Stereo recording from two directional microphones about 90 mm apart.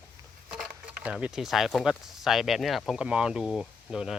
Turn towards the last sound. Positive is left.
turn(degrees=-5)  # may be behind; listen again after turning